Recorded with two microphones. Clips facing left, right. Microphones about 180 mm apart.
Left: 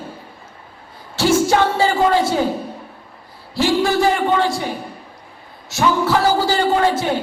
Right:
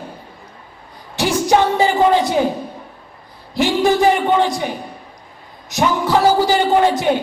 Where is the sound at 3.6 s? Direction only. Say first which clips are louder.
Right 2 dB; 20° right (ahead or behind).